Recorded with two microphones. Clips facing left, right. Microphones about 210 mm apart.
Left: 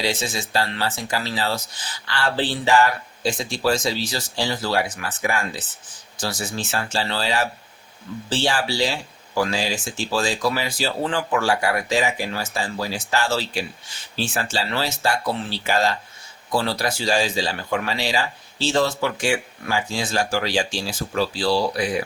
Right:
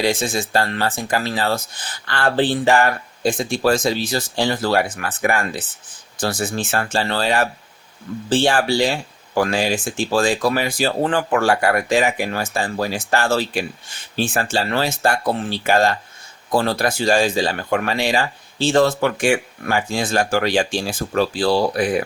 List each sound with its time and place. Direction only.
0.0 s speech: 50° right (ahead or behind)